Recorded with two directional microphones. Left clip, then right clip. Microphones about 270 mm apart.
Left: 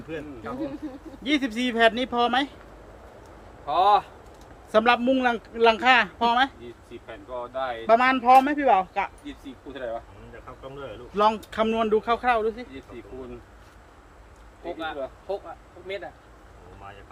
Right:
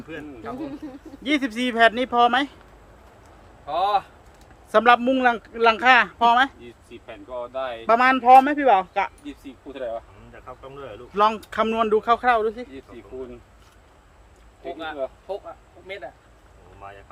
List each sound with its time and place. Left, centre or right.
0.1 s speech: centre
3.7 s speech: centre
4.7 s speech: centre
7.1 s speech: right
7.9 s speech: centre
10.8 s speech: centre
15.9 s speech: centre